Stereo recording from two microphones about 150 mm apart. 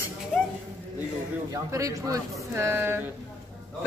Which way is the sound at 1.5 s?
20° right (ahead or behind).